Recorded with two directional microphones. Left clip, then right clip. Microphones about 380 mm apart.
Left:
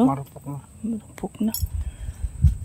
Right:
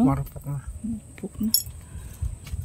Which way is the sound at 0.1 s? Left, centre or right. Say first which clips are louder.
Left 1 dB; right.